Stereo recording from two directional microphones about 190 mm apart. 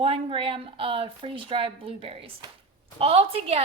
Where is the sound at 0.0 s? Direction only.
30° right (ahead or behind).